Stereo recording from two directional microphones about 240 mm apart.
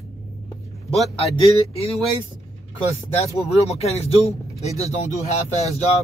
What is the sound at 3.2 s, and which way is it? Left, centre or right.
Speech, left.